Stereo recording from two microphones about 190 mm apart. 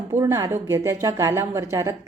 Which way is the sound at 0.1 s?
15° right (ahead or behind).